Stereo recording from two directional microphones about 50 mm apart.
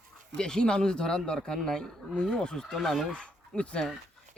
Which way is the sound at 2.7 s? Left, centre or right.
Centre.